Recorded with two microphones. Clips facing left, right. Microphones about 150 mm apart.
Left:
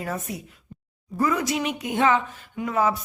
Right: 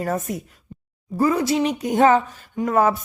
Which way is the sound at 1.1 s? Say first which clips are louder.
Right 5 dB; 30° right (ahead or behind).